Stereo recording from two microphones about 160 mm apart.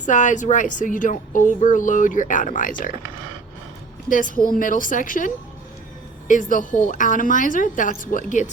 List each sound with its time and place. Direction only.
0.0 s speech: 50° left (ahead or behind)
4.1 s a woman's voice: 60° left (ahead or behind)